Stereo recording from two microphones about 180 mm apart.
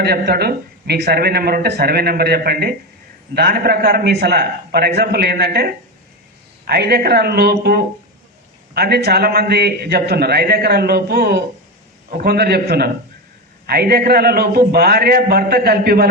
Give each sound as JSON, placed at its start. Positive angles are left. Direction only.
{"t": 0.0, "sound": "a man's voice", "side_deg": -60}